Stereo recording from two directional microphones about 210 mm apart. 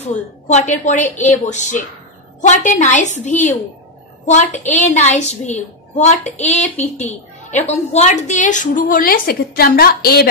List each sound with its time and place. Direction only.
0.0 s a woman's voice: 35° left (ahead or behind)